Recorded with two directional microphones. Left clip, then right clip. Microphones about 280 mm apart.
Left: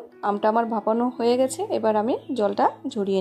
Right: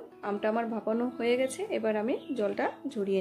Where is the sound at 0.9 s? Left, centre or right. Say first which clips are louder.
Left 7 dB; centre.